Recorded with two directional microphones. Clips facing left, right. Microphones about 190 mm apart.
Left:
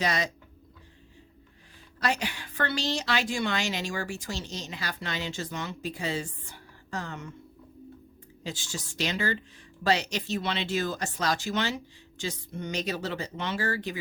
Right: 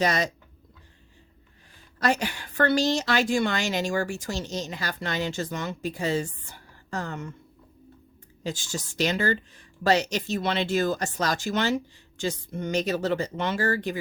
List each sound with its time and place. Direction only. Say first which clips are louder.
0.0 s a woman's voice: right 4 dB; 45° right (ahead or behind)
2.0 s a woman's voice: right 4 dB; 45° right (ahead or behind)
8.4 s a woman's voice: right 5 dB; 45° right (ahead or behind)